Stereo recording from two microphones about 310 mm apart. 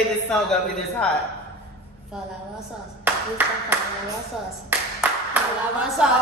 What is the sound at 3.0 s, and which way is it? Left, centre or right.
Clapping, centre.